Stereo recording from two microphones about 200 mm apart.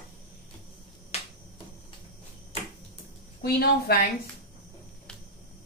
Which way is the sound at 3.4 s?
50° left (ahead or behind).